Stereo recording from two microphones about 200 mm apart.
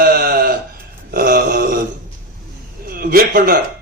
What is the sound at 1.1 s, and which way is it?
Grunt, 50° right (ahead or behind).